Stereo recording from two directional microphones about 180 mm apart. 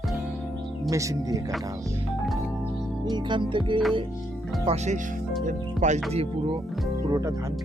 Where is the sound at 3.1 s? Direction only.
25° right (ahead or behind).